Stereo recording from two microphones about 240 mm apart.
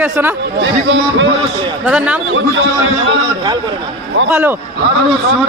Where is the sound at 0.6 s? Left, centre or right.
Right.